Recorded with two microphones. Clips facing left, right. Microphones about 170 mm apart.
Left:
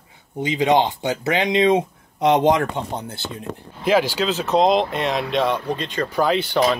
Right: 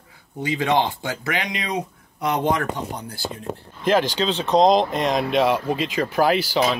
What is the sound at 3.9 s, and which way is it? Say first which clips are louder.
Speech: left 1 dB; 10° left (ahead or behind).